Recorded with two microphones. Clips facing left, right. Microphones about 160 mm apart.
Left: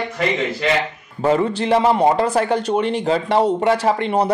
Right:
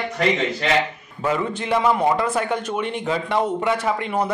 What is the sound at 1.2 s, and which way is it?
A man's voice, 35° left (ahead or behind).